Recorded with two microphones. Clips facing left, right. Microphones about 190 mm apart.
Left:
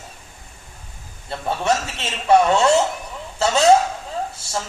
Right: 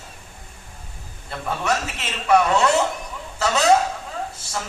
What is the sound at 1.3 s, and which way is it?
A man's voice, 30° left (ahead or behind).